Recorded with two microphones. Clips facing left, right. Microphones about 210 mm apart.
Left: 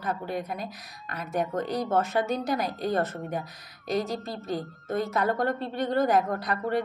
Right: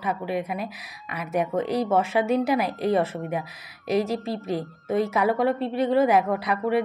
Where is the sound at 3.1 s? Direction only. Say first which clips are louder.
Right 4 dB; 5° right (ahead or behind).